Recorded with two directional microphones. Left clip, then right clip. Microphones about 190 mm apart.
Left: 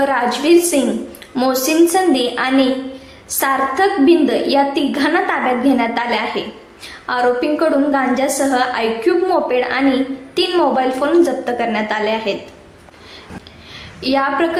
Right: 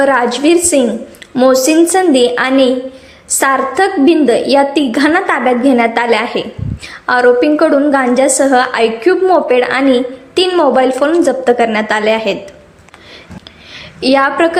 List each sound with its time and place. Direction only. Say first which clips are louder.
0.0 s a woman's voice: right 5 dB; 45° right (ahead or behind)
14.0 s a woman's voice: right 6 dB; 50° right (ahead or behind)